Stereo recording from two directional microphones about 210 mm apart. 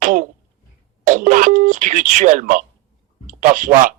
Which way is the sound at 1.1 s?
35° right (ahead or behind).